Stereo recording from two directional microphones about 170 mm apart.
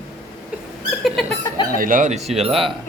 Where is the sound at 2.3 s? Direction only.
35° right (ahead or behind).